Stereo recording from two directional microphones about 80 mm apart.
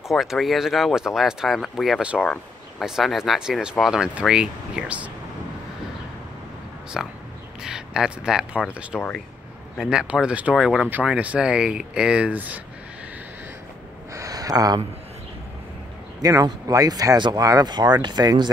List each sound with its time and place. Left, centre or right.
0.1 s speech: centre
2.0 s speech: centre
7.0 s speech: centre
8.9 s speech: centre
9.8 s speech: centre
10.5 s speech: centre
10.9 s speech: centre
14.1 s a sound: right
16.2 s speech: right